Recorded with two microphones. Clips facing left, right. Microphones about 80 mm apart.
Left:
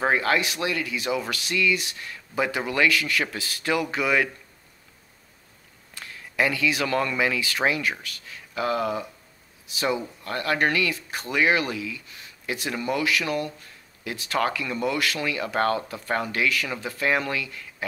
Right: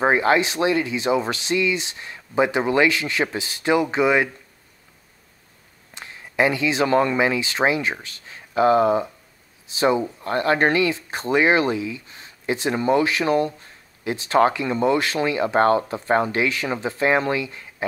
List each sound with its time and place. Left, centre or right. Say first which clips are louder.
0.0 s speech: right 5 dB; right
5.9 s speech: right 4 dB; right